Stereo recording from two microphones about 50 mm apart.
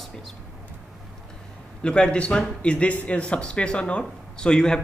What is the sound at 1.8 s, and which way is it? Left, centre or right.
A man's voice, centre.